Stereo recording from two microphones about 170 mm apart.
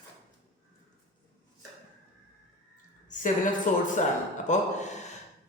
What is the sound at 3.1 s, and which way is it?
A woman's voice, 50° left (ahead or behind).